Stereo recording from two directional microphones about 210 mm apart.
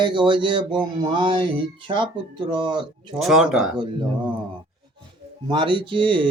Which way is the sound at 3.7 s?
25° right (ahead or behind).